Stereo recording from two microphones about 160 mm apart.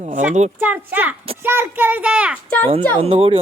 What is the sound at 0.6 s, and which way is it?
A child's voice, 10° right (ahead or behind).